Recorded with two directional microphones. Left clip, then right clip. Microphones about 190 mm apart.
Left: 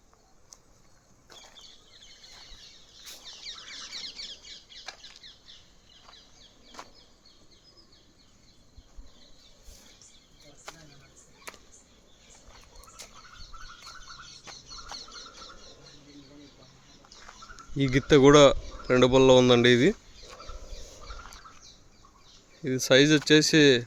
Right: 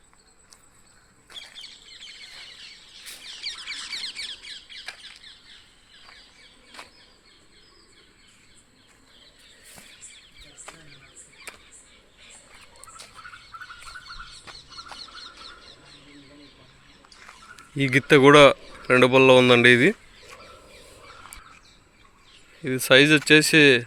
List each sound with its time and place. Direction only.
3.4 s a sound: 25° left (ahead or behind)
4.9 s bird flight: centre (ahead or behind)
11.5 s a sound: 20° left (ahead or behind)
13.0 s bird: centre (ahead or behind)
14.5 s chicken: 5° right (ahead or behind)
17.2 s speech: centre (ahead or behind)
22.6 s speech: centre (ahead or behind)